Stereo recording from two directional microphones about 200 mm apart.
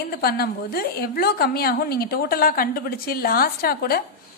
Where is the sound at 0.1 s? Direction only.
50° left (ahead or behind).